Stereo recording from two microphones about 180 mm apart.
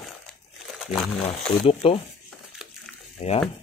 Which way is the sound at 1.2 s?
35° left (ahead or behind).